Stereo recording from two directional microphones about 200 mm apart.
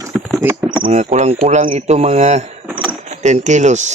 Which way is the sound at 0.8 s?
35° right (ahead or behind).